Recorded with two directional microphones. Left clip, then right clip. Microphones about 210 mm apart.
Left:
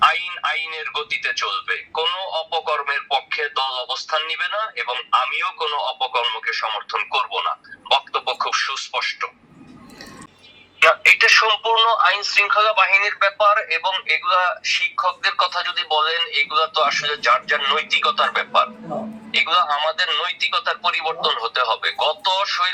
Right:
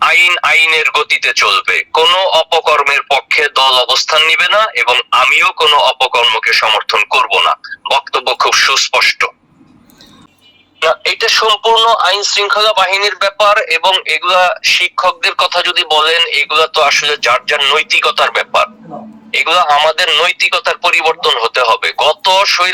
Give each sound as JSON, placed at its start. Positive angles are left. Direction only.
{"t": 0.0, "sound": "a man's voice", "side_deg": -50}
{"t": 10.8, "sound": "a man's voice", "side_deg": -55}